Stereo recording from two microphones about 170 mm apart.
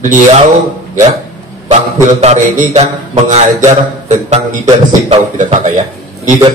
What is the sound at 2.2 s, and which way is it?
A man's voice, 50° right (ahead or behind).